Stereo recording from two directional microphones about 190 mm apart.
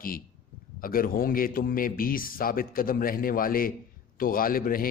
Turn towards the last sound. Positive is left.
turn(degrees=50)  # may be behind; listen again after turning